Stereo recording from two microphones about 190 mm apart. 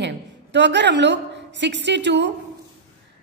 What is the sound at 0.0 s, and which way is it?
A woman's voice, 65° right (ahead or behind).